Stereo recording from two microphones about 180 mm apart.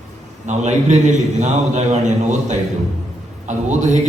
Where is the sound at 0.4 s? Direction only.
40° right (ahead or behind).